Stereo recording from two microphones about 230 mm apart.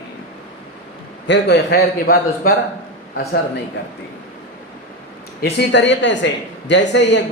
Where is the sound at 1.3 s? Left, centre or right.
Left.